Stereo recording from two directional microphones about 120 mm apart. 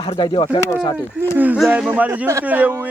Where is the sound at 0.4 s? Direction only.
30° left (ahead or behind).